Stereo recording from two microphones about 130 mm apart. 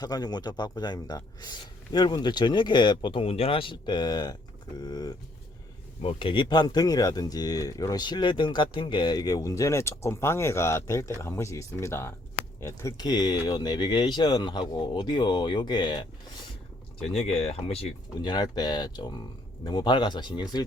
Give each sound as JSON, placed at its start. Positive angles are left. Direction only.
{"t": 0.0, "sound": "speech", "side_deg": 30}
{"t": 6.0, "sound": "speech", "side_deg": 45}
{"t": 17.0, "sound": "speech", "side_deg": 50}
{"t": 18.2, "sound": "speech", "side_deg": 35}